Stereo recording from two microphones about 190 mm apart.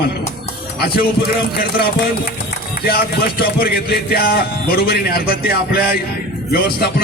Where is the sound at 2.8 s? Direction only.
55° left (ahead or behind).